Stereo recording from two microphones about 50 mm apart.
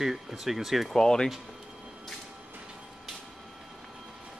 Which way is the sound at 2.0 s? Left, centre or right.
Centre.